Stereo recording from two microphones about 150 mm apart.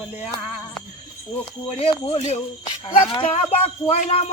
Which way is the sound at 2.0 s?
45° left (ahead or behind).